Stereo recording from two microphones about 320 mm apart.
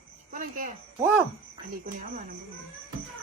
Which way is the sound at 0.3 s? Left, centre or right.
Right.